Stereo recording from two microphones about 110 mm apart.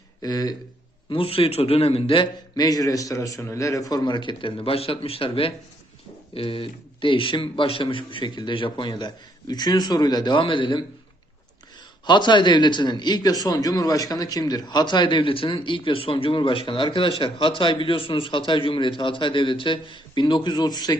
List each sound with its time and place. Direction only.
0.2 s speech: 35° left (ahead or behind)
1.1 s speech: 55° left (ahead or behind)
2.6 s a man's voice: 35° left (ahead or behind)
12.0 s a man's voice: 45° left (ahead or behind)